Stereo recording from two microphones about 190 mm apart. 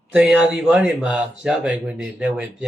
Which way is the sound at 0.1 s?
5° right (ahead or behind).